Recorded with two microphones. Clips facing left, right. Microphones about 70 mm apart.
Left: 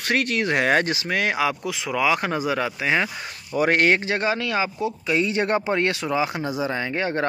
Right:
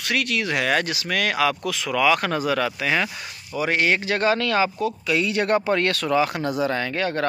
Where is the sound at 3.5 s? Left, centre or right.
Left.